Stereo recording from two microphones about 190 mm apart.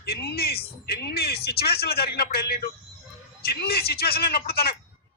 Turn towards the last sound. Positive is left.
turn(degrees=55)  # may be behind; listen again after turning